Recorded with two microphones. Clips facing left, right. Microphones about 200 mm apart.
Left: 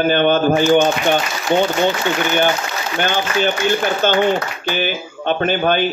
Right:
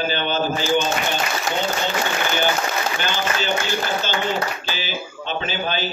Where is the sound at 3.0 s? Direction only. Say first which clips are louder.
Left 6 dB; 55° left (ahead or behind).